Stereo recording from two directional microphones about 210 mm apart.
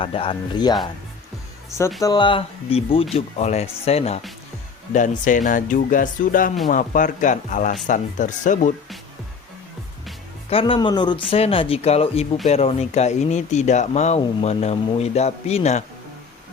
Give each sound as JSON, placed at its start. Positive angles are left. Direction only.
{"t": 0.0, "sound": "speech", "side_deg": 25}
{"t": 2.0, "sound": "speech", "side_deg": 20}
{"t": 10.5, "sound": "speech", "side_deg": 25}